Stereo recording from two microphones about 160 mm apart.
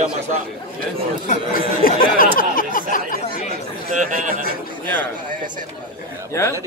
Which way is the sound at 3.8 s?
55° right (ahead or behind).